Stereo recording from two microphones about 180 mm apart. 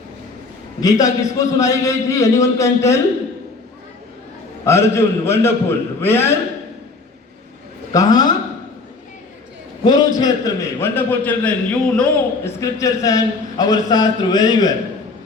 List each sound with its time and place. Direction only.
0.8 s a man's voice: 20° left (ahead or behind)
4.6 s a man's voice: 15° left (ahead or behind)
7.9 s a man's voice: 20° left (ahead or behind)
9.8 s a man's voice: 20° left (ahead or behind); by 12.2 s 5° left (ahead or behind)
12.5 s a man's voice: 15° left (ahead or behind)